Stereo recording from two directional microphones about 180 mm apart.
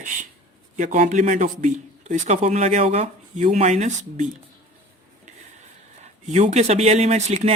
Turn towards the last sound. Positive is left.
turn(degrees=-40)  # may be behind; listen again after turning